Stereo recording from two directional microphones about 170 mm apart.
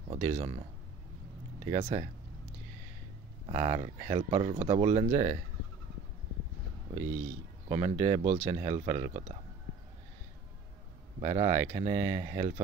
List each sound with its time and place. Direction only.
0.1 s speech: 40° right (ahead or behind)
1.7 s speech: 40° right (ahead or behind)
3.4 s speech: 35° right (ahead or behind)
7.6 s speech: 35° right (ahead or behind)
11.1 s speech: 40° right (ahead or behind)